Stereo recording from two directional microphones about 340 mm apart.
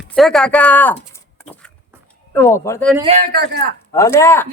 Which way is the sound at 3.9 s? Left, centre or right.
Centre.